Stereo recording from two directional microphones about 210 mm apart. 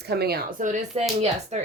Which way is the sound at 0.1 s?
50° right (ahead or behind).